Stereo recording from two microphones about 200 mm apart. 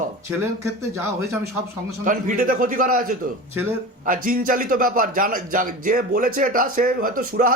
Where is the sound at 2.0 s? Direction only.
40° right (ahead or behind).